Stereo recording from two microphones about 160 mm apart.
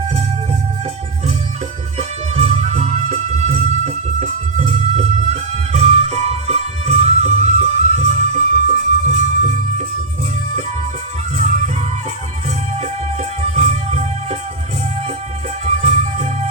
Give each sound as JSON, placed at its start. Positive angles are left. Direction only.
{"t": 2.0, "sound": "music", "side_deg": -40}
{"t": 11.3, "sound": "music", "side_deg": -45}
{"t": 13.4, "sound": "music", "side_deg": -40}
{"t": 15.6, "sound": "music", "side_deg": -40}